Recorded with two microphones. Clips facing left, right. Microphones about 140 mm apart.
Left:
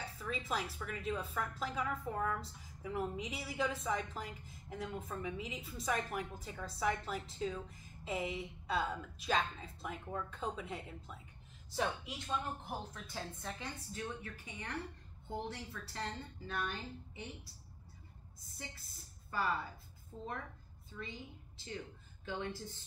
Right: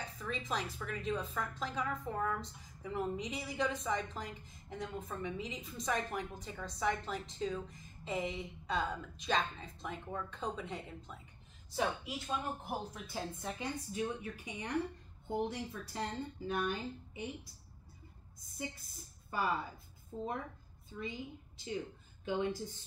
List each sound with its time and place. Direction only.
0.0 s speech: 5° left (ahead or behind); by 17.3 s 15° right (ahead or behind)
18.6 s a woman's voice: 15° right (ahead or behind)